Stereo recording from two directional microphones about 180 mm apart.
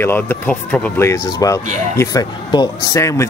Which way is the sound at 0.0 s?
10° left (ahead or behind).